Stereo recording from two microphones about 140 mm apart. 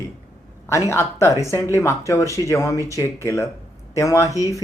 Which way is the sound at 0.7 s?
20° left (ahead or behind).